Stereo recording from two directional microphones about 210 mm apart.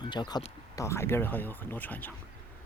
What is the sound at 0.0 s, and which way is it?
Speech, 20° left (ahead or behind).